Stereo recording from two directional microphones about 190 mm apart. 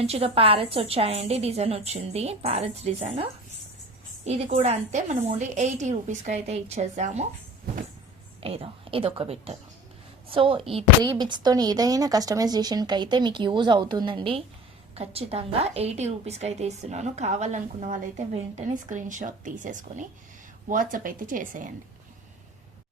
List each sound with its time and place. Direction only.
0.0 s a woman's voice: 30° right (ahead or behind)
4.5 s a woman's voice: 35° right (ahead or behind)
8.4 s a woman's voice: 30° right (ahead or behind)